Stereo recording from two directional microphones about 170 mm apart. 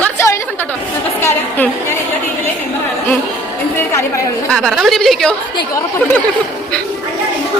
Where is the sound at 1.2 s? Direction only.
10° left (ahead or behind).